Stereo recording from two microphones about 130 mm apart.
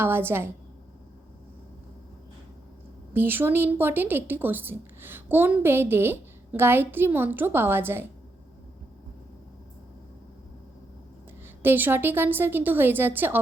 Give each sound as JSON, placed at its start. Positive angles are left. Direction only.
{"t": 0.0, "sound": "a woman's voice", "side_deg": -15}
{"t": 3.1, "sound": "a woman's voice", "side_deg": -15}
{"t": 11.6, "sound": "a woman's voice", "side_deg": -15}